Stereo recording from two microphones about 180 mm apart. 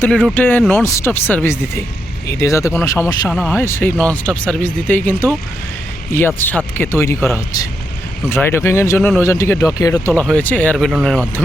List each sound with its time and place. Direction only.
0.3 s speech: 10° left (ahead or behind)
3.2 s speech: 10° left (ahead or behind)